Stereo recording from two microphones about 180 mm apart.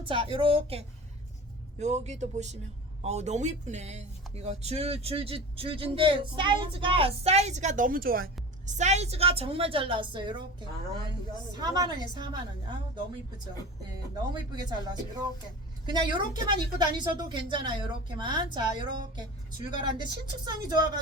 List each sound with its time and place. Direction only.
0.0 s speech: 30° right (ahead or behind)
11.5 s a woman's voice: 25° right (ahead or behind)
14.5 s a woman's voice: 25° right (ahead or behind)